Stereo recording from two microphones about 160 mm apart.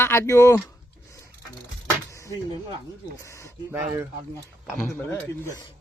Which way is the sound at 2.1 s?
20° left (ahead or behind).